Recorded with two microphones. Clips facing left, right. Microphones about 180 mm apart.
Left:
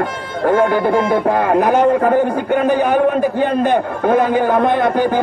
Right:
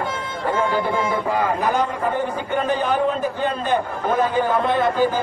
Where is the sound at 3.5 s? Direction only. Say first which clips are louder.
Left 7 dB; 55° left (ahead or behind).